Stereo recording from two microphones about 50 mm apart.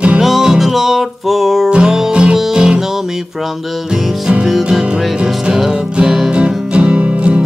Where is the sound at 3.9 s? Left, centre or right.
Centre.